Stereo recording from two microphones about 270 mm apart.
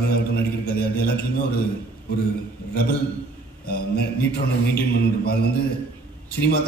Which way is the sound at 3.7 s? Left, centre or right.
Left.